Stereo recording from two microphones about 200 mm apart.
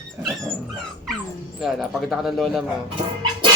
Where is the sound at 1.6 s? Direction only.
Centre (ahead or behind).